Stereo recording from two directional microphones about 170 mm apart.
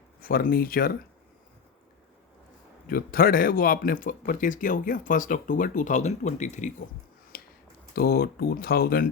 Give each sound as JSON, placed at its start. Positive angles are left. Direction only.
{"t": 0.2, "sound": "speech", "side_deg": 60}
{"t": 2.8, "sound": "speech", "side_deg": 60}
{"t": 7.3, "sound": "a sound", "side_deg": 60}
{"t": 7.9, "sound": "speech", "side_deg": 65}